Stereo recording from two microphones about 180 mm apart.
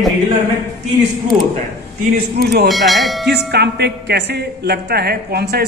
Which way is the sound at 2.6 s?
Centre (ahead or behind).